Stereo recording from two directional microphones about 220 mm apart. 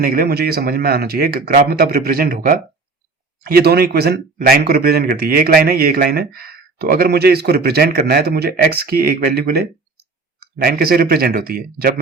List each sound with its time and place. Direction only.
0.0 s speech: 40° right (ahead or behind)